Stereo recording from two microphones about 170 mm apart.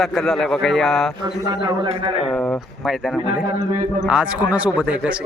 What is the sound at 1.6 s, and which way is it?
Speech, 25° right (ahead or behind).